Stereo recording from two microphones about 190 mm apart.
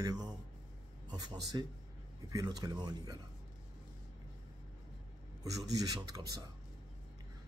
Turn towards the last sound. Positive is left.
turn(degrees=-20)  # may be behind; listen again after turning